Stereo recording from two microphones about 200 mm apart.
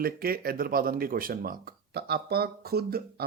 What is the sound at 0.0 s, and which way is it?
Speech, 45° right (ahead or behind).